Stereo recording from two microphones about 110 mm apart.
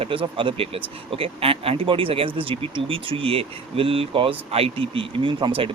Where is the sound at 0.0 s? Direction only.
55° right (ahead or behind).